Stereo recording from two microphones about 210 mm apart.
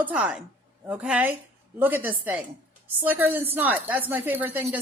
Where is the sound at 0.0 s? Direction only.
5° right (ahead or behind).